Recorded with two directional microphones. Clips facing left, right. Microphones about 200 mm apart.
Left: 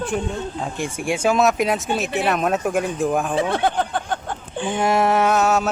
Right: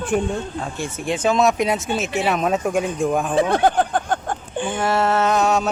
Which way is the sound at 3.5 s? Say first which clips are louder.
Right 3 dB; 45° right (ahead or behind).